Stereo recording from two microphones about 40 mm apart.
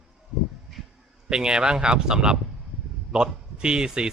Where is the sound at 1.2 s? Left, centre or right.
Right.